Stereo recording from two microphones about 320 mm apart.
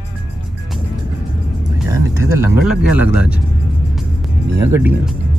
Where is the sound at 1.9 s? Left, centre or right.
Centre.